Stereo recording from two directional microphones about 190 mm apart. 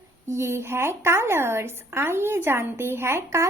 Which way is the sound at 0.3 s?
15° right (ahead or behind).